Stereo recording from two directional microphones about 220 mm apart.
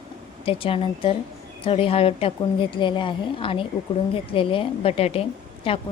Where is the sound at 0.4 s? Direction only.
25° left (ahead or behind).